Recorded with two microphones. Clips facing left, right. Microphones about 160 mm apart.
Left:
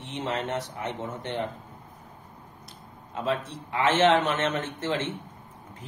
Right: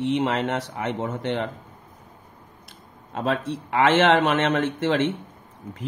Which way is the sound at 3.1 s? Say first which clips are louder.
Right 4 dB; 75° right (ahead or behind).